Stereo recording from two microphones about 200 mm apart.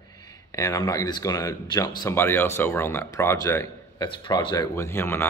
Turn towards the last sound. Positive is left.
turn(degrees=10)  # may be behind; listen again after turning